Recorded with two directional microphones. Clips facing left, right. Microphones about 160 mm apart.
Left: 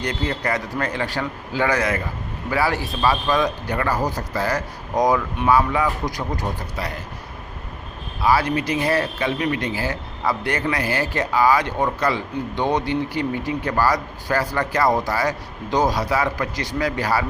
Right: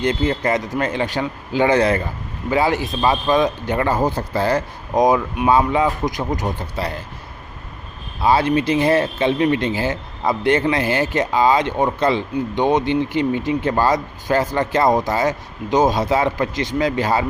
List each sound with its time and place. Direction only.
0.0 s speech: 25° right (ahead or behind)
8.2 s speech: 25° right (ahead or behind)